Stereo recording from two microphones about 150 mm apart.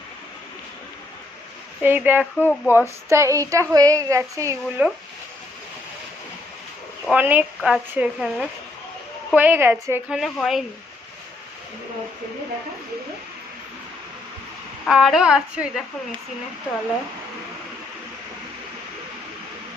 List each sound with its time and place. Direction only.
1.8 s a woman's voice: 15° right (ahead or behind)
2.4 s speech: 15° left (ahead or behind)
2.7 s a woman's voice: 20° right (ahead or behind)
7.1 s a woman's voice: 10° right (ahead or behind)
10.1 s speech: centre (ahead or behind)
14.8 s speech: centre (ahead or behind)